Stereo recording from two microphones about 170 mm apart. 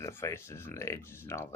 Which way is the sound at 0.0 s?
15° left (ahead or behind).